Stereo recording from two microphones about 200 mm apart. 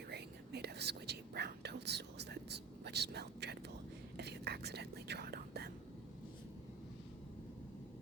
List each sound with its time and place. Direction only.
0.1 s whispering: 55° right (ahead or behind)